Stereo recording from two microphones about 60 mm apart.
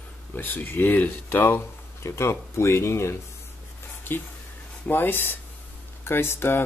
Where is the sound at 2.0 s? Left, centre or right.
Left.